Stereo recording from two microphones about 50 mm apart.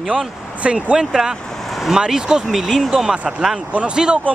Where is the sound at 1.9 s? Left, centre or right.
Centre.